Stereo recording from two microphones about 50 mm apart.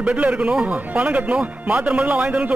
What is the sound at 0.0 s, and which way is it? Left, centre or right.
Speech, right.